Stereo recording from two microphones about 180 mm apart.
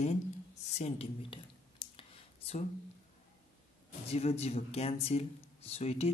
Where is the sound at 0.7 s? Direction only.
35° left (ahead or behind).